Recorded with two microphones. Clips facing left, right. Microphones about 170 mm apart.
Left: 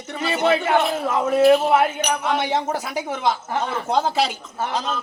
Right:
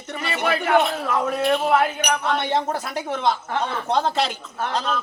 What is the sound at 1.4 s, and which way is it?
A woman's voice, 5° left (ahead or behind).